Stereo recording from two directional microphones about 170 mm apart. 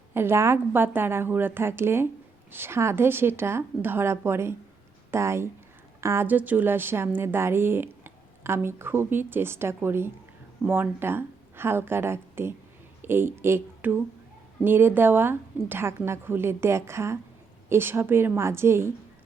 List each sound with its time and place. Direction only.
0.1 s a woman's voice: 15° right (ahead or behind)